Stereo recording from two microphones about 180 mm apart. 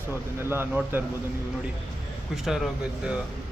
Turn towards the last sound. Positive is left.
turn(degrees=-5)  # may be behind; listen again after turning